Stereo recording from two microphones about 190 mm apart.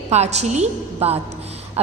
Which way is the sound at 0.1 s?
35° right (ahead or behind).